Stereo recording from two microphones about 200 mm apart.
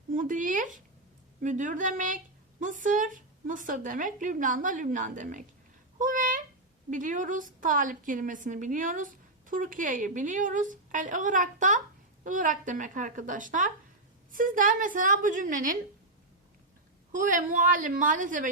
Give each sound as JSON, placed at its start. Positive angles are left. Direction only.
{"t": 0.1, "sound": "a woman's voice", "side_deg": -40}
{"t": 17.1, "sound": "a woman's voice", "side_deg": -40}